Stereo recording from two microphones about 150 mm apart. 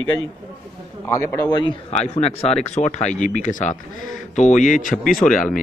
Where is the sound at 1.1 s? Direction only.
20° left (ahead or behind).